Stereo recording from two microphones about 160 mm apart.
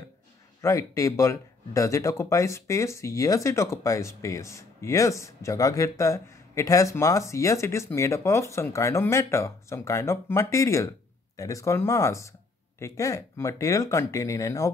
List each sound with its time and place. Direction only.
0.6 s speech: 20° left (ahead or behind)